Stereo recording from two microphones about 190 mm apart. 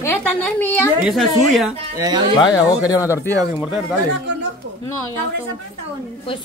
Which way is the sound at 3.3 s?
15° right (ahead or behind).